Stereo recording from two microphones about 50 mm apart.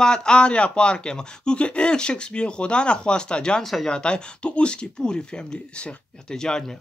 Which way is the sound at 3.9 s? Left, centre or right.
Centre.